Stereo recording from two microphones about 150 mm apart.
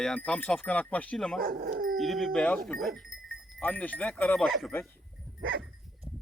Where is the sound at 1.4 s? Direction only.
80° right.